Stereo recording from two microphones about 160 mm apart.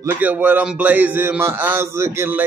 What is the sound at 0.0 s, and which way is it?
A man's voice, 10° right (ahead or behind).